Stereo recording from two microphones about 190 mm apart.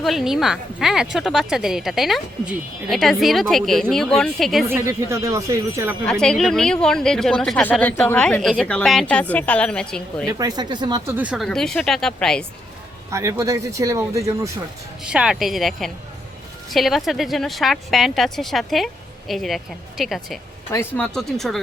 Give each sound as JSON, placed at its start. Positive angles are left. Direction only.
{"t": 0.0, "sound": "a woman's voice", "side_deg": 0}
{"t": 4.7, "sound": "speech", "side_deg": -15}
{"t": 6.1, "sound": "a woman's voice", "side_deg": 5}
{"t": 10.2, "sound": "speech", "side_deg": -20}
{"t": 11.2, "sound": "a woman's voice", "side_deg": -5}
{"t": 13.1, "sound": "speech", "side_deg": -15}
{"t": 15.0, "sound": "a woman's voice", "side_deg": -5}